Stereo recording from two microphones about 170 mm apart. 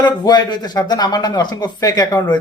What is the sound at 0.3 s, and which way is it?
Speech, 25° left (ahead or behind).